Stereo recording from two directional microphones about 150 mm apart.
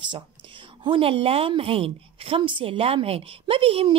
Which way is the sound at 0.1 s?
35° right (ahead or behind).